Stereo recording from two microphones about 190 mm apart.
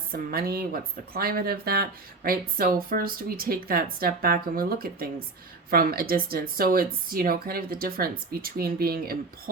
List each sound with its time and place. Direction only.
0.1 s speech: 55° right (ahead or behind)